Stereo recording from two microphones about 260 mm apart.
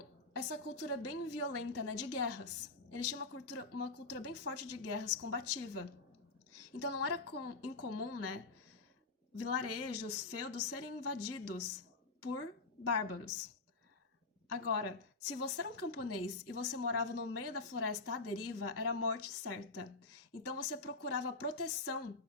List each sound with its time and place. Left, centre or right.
0.3 s a woman's voice: left
14.5 s a woman's voice: left